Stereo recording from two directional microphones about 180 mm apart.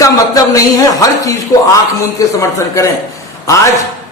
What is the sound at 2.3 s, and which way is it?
Speech, 15° left (ahead or behind).